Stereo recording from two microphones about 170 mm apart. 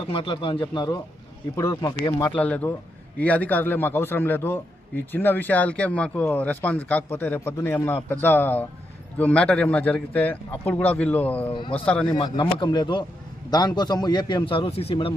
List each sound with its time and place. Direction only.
0.1 s a man's voice: 30° left (ahead or behind)
2.3 s a man's voice: 10° left (ahead or behind)
11.5 s speech: 30° left (ahead or behind)
11.9 s a man's voice: 10° left (ahead or behind)
12.4 s a man's voice: 25° left (ahead or behind)